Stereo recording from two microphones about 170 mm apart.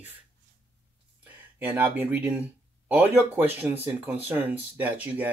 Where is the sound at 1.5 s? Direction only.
10° right (ahead or behind).